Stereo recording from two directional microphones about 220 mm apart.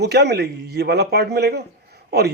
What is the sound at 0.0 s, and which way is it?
A man's voice, 50° right (ahead or behind).